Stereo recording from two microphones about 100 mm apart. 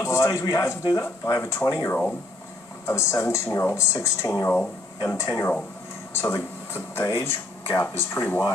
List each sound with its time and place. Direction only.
0.0 s a man's voice: 30° left (ahead or behind)